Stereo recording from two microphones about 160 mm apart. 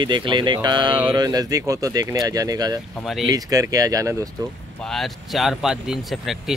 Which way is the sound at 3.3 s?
20° right (ahead or behind).